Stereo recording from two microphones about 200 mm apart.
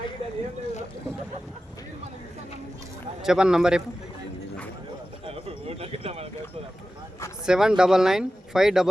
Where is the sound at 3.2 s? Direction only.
5° right (ahead or behind).